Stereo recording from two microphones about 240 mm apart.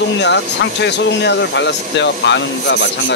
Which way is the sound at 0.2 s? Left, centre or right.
Left.